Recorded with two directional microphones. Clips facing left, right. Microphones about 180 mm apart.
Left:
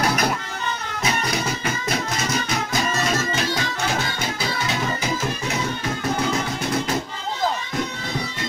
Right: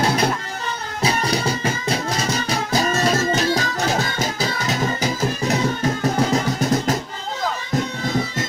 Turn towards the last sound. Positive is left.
turn(degrees=-40)  # may be behind; listen again after turning